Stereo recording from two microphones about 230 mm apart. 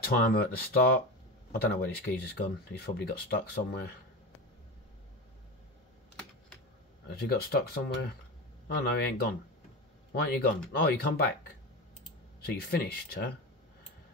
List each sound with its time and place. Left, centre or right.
0.0 s speech: left
1.5 s speech: left
7.1 s speech: left
12.4 s speech: left